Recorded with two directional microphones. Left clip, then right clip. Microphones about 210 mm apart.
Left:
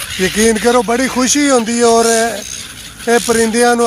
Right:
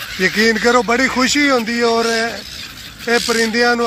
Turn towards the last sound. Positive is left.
turn(degrees=20)  # may be behind; listen again after turning